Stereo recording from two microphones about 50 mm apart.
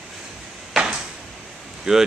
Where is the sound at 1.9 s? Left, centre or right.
Centre.